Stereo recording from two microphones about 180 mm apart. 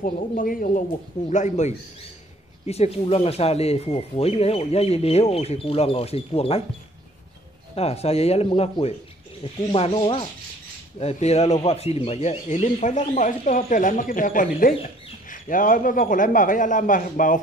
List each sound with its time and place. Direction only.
0.0 s a man's voice: 50° left (ahead or behind); by 6.6 s 35° left (ahead or behind)
7.7 s a man's voice: 35° left (ahead or behind)